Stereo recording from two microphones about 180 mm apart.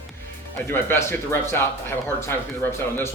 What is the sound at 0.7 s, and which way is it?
Speech, 10° left (ahead or behind).